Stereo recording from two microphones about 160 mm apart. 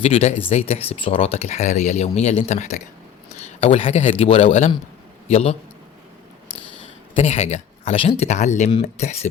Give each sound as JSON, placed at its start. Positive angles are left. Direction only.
{"t": 0.0, "sound": "speech", "side_deg": 40}
{"t": 7.1, "sound": "speech", "side_deg": 40}